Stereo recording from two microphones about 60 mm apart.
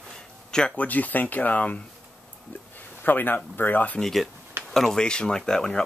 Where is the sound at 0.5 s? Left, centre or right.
Centre.